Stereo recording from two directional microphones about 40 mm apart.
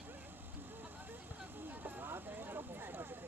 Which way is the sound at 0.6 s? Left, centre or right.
Right.